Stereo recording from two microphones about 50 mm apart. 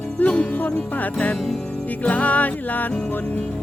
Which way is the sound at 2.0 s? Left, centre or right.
Left.